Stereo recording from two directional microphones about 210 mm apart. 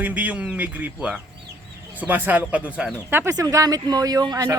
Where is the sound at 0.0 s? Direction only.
5° right (ahead or behind).